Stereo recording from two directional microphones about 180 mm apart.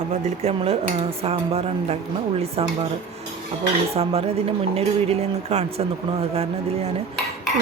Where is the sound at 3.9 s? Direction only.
35° right (ahead or behind).